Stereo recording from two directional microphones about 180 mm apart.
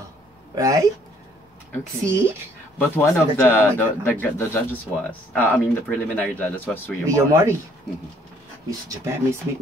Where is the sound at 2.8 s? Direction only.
10° left (ahead or behind).